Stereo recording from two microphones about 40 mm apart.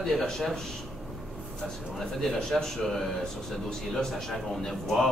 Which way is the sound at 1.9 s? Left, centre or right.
Centre.